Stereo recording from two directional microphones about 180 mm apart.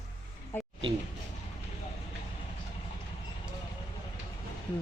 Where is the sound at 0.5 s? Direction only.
10° left (ahead or behind).